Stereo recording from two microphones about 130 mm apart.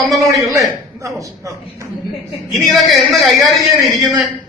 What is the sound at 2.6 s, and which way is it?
A man's voice, centre (ahead or behind).